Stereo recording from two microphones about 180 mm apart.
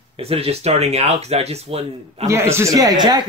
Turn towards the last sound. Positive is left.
turn(degrees=-25)  # may be behind; listen again after turning